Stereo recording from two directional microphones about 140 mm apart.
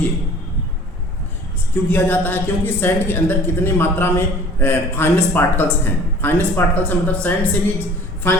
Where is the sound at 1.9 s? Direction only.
15° left (ahead or behind).